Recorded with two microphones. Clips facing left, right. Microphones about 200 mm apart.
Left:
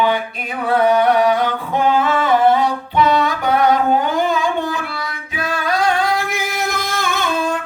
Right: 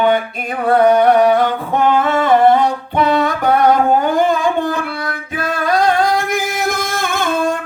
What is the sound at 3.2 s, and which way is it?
Music, 50° right (ahead or behind).